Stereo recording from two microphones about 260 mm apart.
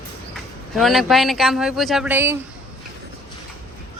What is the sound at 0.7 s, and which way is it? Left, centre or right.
Speech, centre.